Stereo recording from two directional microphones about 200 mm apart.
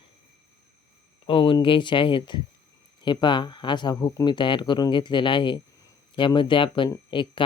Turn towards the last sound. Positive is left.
turn(degrees=25)  # may be behind; listen again after turning